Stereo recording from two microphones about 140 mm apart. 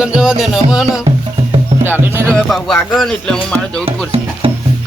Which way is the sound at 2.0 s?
15° right (ahead or behind).